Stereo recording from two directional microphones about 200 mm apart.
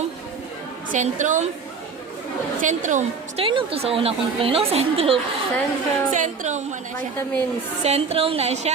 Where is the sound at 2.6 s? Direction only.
40° right (ahead or behind).